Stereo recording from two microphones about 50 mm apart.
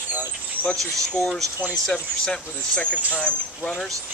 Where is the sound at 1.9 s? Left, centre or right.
Centre.